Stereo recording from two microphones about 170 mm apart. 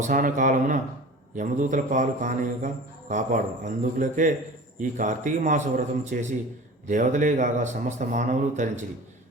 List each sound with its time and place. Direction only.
0.0 s a man's voice: 50° right (ahead or behind)